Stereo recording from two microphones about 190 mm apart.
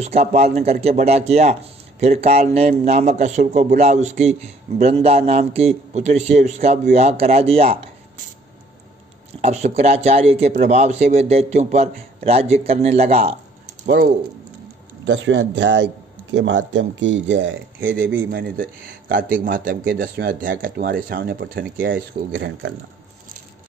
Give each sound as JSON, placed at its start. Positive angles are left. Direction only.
{"t": 0.0, "sound": "speech", "side_deg": -35}
{"t": 9.4, "sound": "speech", "side_deg": -35}
{"t": 13.8, "sound": "speech", "side_deg": -55}
{"t": 15.1, "sound": "a man's voice", "side_deg": -75}
{"t": 17.8, "sound": "speech", "side_deg": -45}
{"t": 22.3, "sound": "a man's voice", "side_deg": -75}